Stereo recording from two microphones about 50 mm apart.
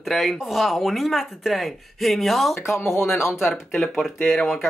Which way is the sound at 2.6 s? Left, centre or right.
Left.